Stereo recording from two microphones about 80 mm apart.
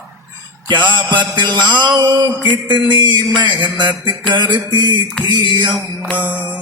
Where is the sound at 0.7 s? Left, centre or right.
Right.